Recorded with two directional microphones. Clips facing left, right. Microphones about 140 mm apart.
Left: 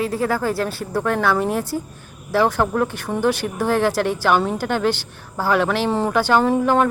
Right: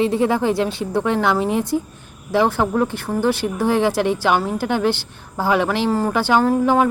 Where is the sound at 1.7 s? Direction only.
5° right (ahead or behind).